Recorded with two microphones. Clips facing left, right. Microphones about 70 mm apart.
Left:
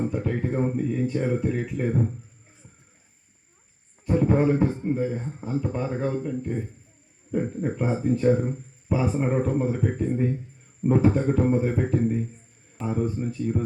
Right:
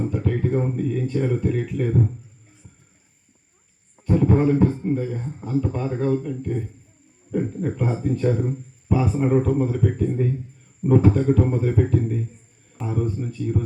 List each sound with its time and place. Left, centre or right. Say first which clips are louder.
0.1 s speech: right 4 dB; centre
4.0 s a sound: right 2 dB; centre
4.6 s speech: right 3 dB; centre